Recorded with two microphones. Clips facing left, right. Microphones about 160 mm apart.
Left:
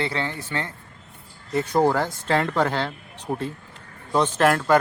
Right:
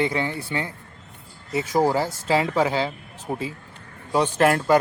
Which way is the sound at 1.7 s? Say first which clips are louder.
Even; 5° right (ahead or behind).